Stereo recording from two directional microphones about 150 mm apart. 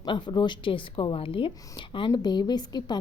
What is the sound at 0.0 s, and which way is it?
Speech, 30° left (ahead or behind).